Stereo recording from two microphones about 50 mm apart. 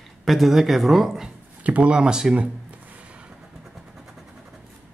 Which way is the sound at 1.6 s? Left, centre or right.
Right.